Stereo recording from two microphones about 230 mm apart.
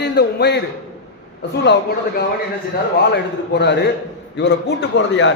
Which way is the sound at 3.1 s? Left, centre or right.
Left.